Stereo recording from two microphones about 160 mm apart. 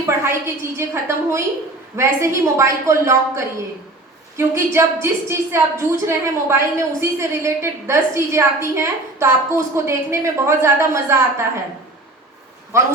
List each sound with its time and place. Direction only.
0.0 s a woman's voice: 15° right (ahead or behind)
12.7 s a woman's voice: 15° right (ahead or behind)